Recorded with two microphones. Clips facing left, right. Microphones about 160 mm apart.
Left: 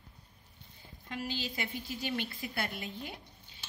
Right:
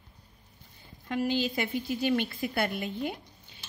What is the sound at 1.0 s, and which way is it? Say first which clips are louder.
A woman's voice: right 10 dB; 55° right (ahead or behind).